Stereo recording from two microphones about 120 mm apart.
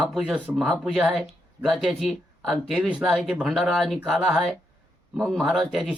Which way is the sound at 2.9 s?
10° right (ahead or behind).